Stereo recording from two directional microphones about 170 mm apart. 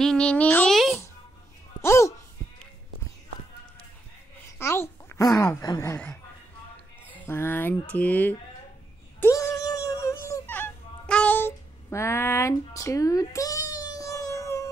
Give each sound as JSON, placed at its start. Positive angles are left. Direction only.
{"t": 0.0, "sound": "a child's voice", "side_deg": 5}
{"t": 1.8, "sound": "speech", "side_deg": 15}
{"t": 4.5, "sound": "a child's voice", "side_deg": 15}
{"t": 7.2, "sound": "speech", "side_deg": 15}
{"t": 9.2, "sound": "a sound", "side_deg": 20}